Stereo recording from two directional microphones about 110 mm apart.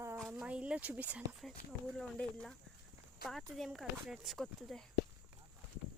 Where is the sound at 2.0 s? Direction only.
5° left (ahead or behind).